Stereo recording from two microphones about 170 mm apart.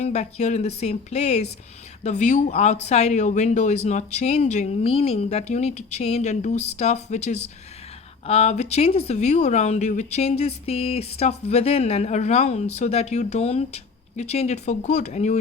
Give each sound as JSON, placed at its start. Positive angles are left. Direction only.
{"t": 0.0, "sound": "speech", "side_deg": 40}